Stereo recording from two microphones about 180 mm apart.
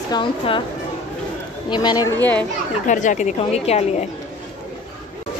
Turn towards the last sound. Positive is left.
turn(degrees=35)  # may be behind; listen again after turning